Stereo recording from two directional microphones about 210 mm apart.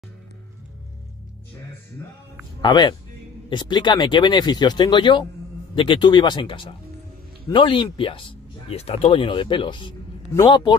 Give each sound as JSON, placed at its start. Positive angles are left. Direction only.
{"t": 2.6, "sound": "speech", "side_deg": 20}